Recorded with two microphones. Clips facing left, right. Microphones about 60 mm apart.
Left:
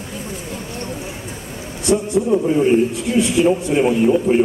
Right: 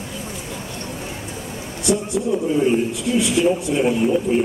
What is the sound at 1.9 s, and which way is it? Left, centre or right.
A man's voice, left.